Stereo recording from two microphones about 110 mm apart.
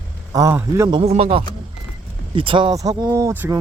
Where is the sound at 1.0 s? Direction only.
65° right (ahead or behind); by 2.7 s 50° right (ahead or behind).